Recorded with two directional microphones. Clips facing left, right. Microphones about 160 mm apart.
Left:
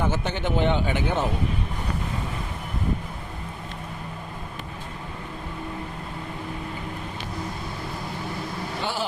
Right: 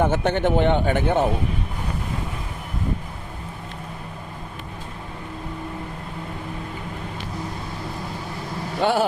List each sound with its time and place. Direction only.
0.0 s speech: 60° right (ahead or behind)
8.8 s speech: 55° right (ahead or behind)